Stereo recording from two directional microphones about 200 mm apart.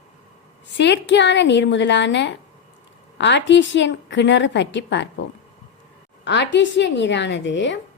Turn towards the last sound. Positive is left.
turn(degrees=60)  # may be behind; listen again after turning